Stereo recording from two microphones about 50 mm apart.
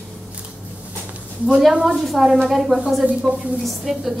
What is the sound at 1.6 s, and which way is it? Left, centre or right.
Speech, centre.